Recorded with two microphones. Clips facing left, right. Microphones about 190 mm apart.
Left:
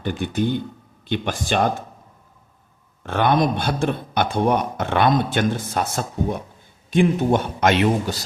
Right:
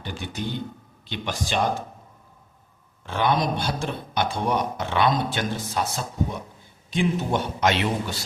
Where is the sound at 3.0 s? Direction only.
55° left (ahead or behind).